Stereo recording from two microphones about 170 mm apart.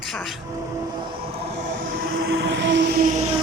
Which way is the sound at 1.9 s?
65° right (ahead or behind).